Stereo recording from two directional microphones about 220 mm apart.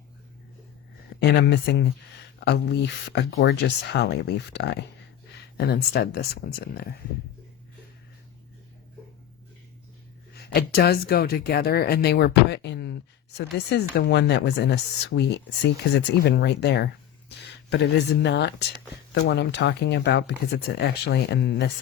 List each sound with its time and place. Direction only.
1.2 s speech: 50° left (ahead or behind)
10.5 s speech: 45° left (ahead or behind)